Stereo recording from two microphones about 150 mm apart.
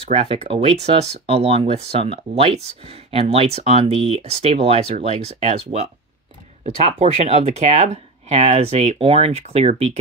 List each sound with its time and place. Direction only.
0.1 s speech: 45° right (ahead or behind)